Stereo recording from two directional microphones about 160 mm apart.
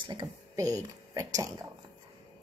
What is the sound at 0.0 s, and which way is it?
Speech, 30° right (ahead or behind).